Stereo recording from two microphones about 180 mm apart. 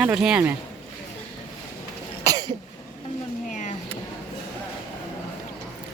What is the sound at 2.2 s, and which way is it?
Cough, 20° right (ahead or behind).